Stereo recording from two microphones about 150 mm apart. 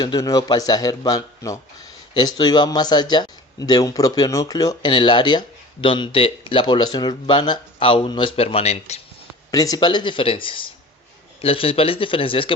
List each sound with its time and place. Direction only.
0.0 s speech: 25° left (ahead or behind); by 9.0 s 45° left (ahead or behind)
9.5 s speech: 25° left (ahead or behind)